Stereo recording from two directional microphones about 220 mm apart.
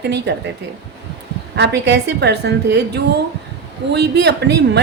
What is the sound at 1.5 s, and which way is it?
A woman's voice, 50° right (ahead or behind).